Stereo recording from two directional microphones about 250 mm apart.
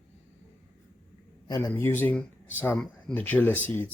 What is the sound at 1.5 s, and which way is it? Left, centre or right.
Speech, centre.